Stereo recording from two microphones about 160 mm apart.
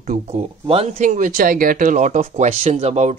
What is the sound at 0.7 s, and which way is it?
Speech, 35° right (ahead or behind).